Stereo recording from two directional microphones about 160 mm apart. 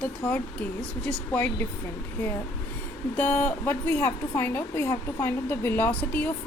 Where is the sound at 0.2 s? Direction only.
15° left (ahead or behind).